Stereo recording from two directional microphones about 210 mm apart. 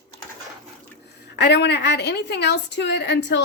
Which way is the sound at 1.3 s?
55° left (ahead or behind).